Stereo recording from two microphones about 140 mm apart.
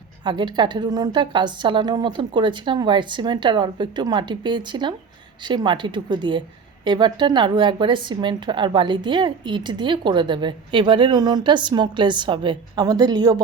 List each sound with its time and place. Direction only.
0.3 s a woman's voice: 35° right (ahead or behind)